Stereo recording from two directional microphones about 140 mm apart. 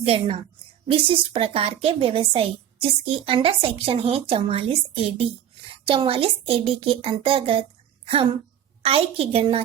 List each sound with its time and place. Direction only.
0.0 s a woman's voice: 45° right (ahead or behind)